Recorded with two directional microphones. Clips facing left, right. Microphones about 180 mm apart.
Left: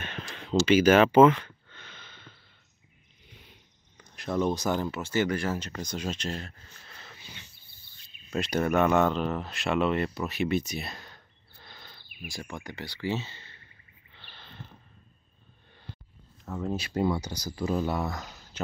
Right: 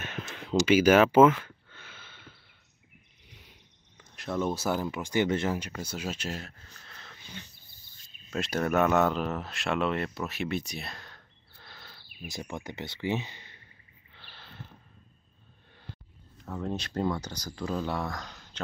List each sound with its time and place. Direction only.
0.0 s a sound: 5° right (ahead or behind)
4.1 s speech: centre (ahead or behind)
8.3 s speech: centre (ahead or behind)
12.1 s speech: 25° right (ahead or behind)
14.1 s a sound: 5° right (ahead or behind)
16.4 s speech: 5° left (ahead or behind)